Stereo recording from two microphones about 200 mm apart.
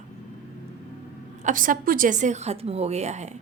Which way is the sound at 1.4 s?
40° right (ahead or behind).